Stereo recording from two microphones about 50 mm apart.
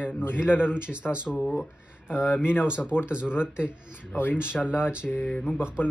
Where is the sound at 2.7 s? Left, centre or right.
Centre.